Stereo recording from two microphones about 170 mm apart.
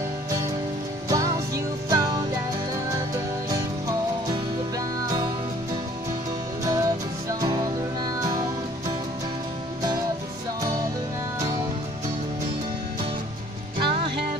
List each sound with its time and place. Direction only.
1.0 s music: 20° right (ahead or behind)
3.4 s music: 20° right (ahead or behind)
6.6 s music: 20° right (ahead or behind)
13.7 s music: 30° right (ahead or behind)